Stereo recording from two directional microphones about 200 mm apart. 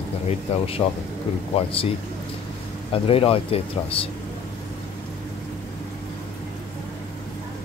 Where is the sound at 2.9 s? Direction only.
30° left (ahead or behind).